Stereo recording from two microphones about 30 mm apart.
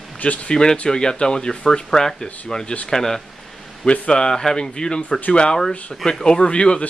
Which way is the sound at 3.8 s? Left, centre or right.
Left.